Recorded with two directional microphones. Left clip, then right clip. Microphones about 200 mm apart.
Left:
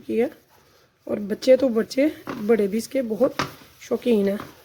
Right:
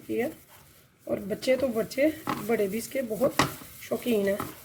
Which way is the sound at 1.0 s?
55° left (ahead or behind).